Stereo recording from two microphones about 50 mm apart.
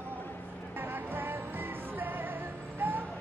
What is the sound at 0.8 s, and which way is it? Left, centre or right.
Music, right.